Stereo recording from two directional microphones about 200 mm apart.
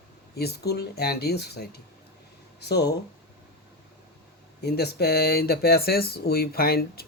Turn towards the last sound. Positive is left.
turn(degrees=50)  # may be behind; listen again after turning